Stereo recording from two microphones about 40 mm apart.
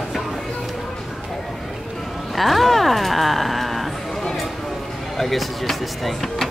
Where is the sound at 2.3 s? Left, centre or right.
Centre.